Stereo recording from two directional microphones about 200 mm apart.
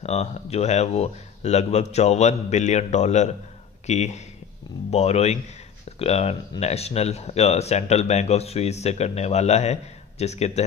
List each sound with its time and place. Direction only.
0.0 s speech: 30° left (ahead or behind)